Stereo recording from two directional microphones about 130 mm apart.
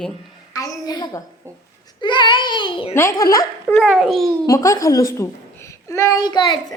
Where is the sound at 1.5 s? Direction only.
20° right (ahead or behind).